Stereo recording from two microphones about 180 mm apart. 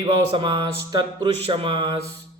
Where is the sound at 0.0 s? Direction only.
25° right (ahead or behind).